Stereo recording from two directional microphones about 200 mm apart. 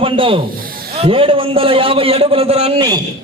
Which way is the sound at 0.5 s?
45° right (ahead or behind).